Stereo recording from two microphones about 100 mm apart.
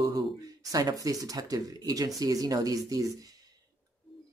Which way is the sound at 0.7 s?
35° right (ahead or behind).